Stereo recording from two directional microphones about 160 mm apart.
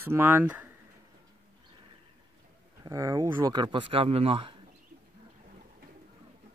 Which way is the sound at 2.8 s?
20° right (ahead or behind).